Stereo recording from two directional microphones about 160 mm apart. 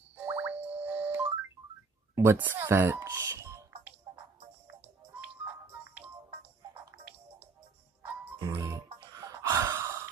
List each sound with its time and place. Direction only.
0.2 s music: 10° right (ahead or behind)
6.8 s music: 10° right (ahead or behind)
9.1 s gasp: 20° right (ahead or behind)